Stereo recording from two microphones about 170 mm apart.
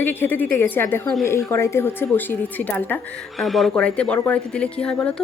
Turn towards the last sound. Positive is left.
turn(degrees=5)  # may be behind; listen again after turning